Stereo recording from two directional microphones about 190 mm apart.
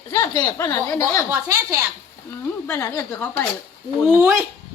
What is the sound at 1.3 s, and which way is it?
Speech, 15° right (ahead or behind).